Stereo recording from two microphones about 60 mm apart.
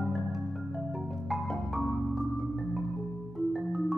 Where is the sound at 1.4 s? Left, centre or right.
Centre.